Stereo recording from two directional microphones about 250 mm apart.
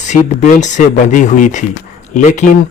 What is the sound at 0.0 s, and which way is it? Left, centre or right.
Speech, left.